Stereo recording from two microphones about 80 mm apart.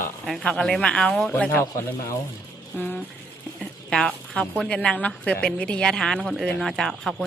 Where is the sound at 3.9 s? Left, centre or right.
Centre.